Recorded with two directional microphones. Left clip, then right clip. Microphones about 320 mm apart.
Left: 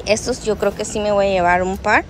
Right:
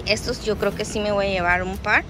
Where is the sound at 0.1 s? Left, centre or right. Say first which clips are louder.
Left 5 dB; centre.